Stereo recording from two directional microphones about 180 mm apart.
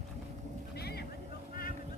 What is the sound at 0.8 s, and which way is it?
Vehicle, 60° left (ahead or behind).